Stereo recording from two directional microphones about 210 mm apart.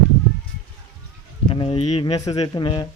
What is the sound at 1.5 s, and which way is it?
Speech, 25° left (ahead or behind).